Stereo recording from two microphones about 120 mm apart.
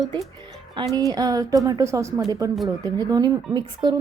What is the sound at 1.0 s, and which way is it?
A woman's voice, 30° right (ahead or behind).